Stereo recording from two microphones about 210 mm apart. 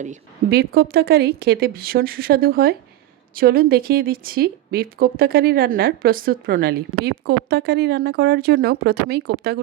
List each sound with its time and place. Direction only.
0.0 s speech: 40° right (ahead or behind)